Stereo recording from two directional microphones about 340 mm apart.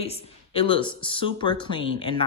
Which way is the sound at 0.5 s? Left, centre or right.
Centre.